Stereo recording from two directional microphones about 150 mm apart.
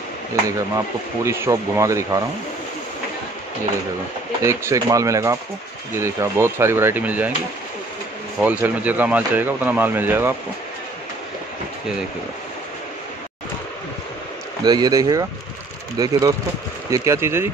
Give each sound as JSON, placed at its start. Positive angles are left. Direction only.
{"t": 0.5, "sound": "speech", "side_deg": -20}
{"t": 4.4, "sound": "speech", "side_deg": -20}
{"t": 8.4, "sound": "speech", "side_deg": -10}
{"t": 14.6, "sound": "speech", "side_deg": -25}